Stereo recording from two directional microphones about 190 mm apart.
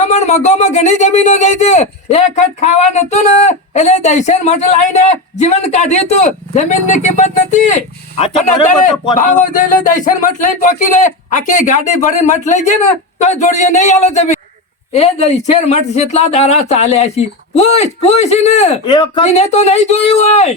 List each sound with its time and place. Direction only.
0.0 s speech: 40° left (ahead or behind)